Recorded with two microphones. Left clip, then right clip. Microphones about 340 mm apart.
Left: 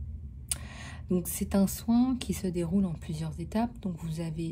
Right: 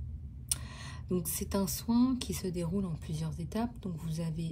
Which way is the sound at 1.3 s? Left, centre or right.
Centre.